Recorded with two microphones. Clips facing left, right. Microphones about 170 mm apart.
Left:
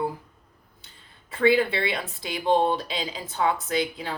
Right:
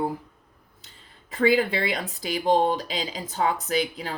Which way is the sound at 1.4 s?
40° right (ahead or behind).